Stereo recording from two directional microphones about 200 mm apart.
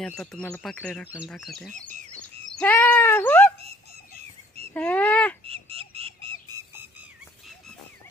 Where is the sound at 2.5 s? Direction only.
10° left (ahead or behind).